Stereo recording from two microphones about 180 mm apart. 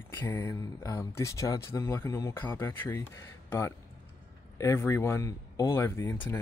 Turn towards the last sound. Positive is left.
turn(degrees=15)  # may be behind; listen again after turning